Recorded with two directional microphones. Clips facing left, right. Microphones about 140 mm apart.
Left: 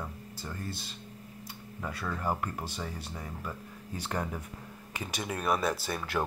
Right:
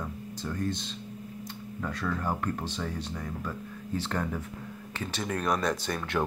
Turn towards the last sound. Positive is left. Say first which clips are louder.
# right 2 dB
turn(degrees=5)  # may be behind; listen again after turning